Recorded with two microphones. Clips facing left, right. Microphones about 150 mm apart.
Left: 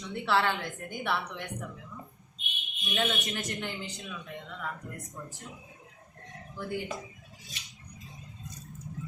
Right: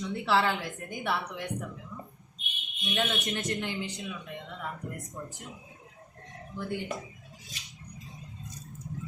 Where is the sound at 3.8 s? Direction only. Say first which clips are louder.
Right 5 dB; 20° right (ahead or behind).